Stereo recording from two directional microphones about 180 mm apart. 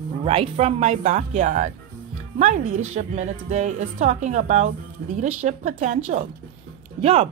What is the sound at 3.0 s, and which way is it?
A woman's voice, 40° right (ahead or behind).